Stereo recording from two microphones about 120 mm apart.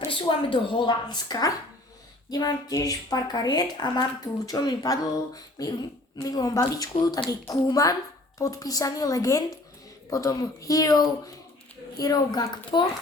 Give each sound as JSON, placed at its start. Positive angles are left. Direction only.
{"t": 0.0, "sound": "a woman's voice", "side_deg": 45}